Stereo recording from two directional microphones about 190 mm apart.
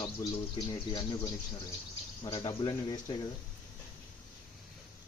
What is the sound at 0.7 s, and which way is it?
Speech, 25° left (ahead or behind).